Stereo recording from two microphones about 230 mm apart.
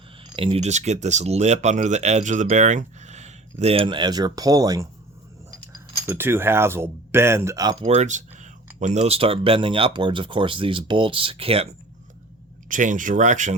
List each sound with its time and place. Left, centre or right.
0.3 s speech: right